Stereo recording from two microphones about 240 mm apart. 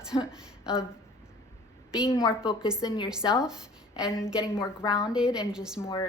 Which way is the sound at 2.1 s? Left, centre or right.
Centre.